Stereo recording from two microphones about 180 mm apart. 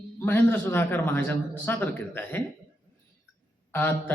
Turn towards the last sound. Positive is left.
turn(degrees=10)  # may be behind; listen again after turning